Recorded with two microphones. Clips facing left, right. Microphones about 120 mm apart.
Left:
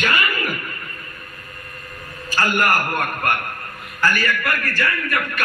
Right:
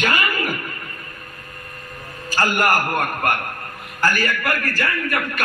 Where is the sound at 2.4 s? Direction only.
35° right (ahead or behind).